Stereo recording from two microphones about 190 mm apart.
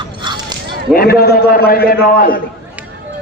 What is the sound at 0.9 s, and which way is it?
A man's voice, 55° left (ahead or behind).